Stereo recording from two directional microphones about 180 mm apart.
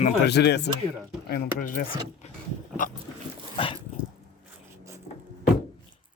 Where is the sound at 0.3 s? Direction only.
70° left (ahead or behind).